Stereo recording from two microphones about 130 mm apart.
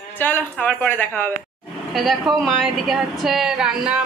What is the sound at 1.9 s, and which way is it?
A woman's voice, centre (ahead or behind).